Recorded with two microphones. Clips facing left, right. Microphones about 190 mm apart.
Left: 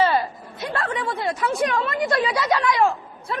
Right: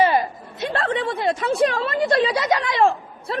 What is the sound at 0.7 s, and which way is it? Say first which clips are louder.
A woman's voice: right 3 dB; 30° right (ahead or behind).